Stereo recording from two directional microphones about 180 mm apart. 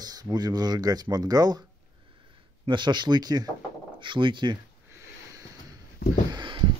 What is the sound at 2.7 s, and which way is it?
Speech, 25° right (ahead or behind).